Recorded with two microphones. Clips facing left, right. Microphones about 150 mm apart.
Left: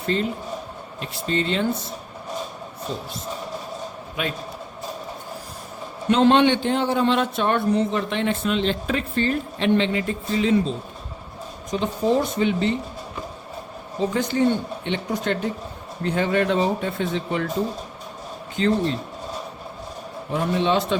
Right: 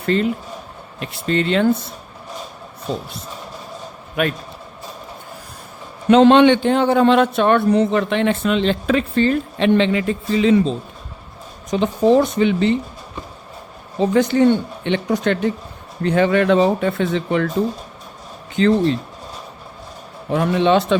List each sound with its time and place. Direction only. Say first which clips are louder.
0.0 s speech: right 5 dB; 70° right (ahead or behind)
4.2 s a man's voice: right 7 dB; 60° right (ahead or behind)
6.1 s a man's voice: right 6 dB; 85° right
11.7 s a man's voice: right 7 dB; 75° right (ahead or behind)
14.1 s a man's voice: right 7 dB; 75° right (ahead or behind)
18.5 s a man's voice: right 6 dB; 85° right
20.3 s speech: right 6 dB; 80° right